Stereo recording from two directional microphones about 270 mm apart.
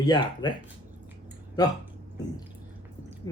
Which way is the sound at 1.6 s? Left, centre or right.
Centre.